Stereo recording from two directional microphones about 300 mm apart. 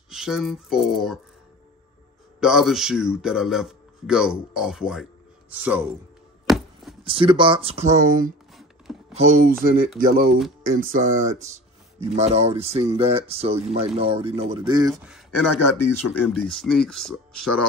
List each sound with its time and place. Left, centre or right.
0.1 s a man's voice: centre
2.4 s a man's voice: centre
6.4 s chopping: centre
7.1 s speech: centre
15.0 s a man's voice: centre